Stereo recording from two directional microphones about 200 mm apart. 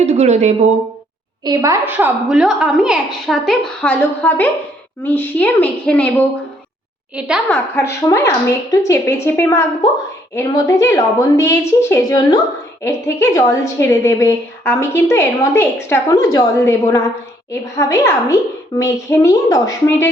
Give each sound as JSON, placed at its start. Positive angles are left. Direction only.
{"t": 0.0, "sound": "speech", "side_deg": -35}
{"t": 1.5, "sound": "a woman's voice", "side_deg": -20}
{"t": 7.2, "sound": "a woman's voice", "side_deg": -5}
{"t": 8.0, "sound": "a woman's voice", "side_deg": 15}